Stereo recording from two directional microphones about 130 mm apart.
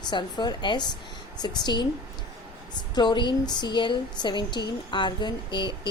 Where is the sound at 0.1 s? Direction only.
35° left (ahead or behind).